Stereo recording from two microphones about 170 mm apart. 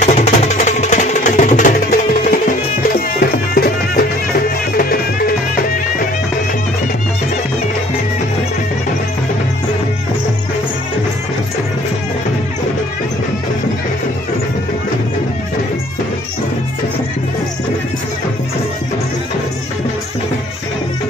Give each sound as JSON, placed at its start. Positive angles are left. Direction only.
{"t": 0.0, "sound": "music", "side_deg": 45}